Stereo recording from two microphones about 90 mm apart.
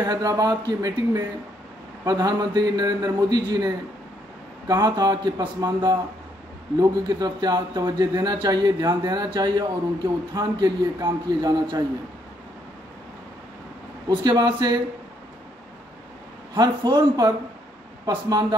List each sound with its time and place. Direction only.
0.0 s a man's voice: 40° right (ahead or behind)
14.0 s a man's voice: 45° right (ahead or behind)
16.5 s a man's voice: 50° right (ahead or behind)